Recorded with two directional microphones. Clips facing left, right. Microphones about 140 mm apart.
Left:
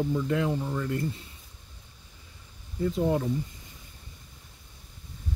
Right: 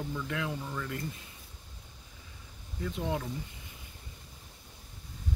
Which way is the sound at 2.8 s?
35° left (ahead or behind).